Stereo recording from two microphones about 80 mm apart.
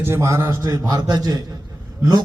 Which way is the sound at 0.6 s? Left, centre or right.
Right.